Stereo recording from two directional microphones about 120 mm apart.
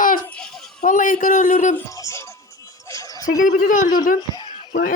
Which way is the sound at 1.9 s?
25° left (ahead or behind).